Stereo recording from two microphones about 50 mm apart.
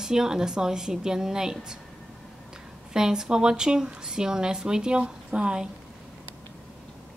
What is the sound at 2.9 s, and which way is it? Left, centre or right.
A woman's voice, centre.